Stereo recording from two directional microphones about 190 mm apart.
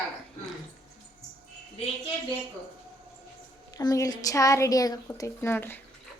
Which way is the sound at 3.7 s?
20° left (ahead or behind).